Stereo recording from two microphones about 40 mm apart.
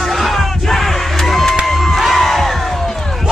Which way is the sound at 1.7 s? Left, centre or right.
Centre.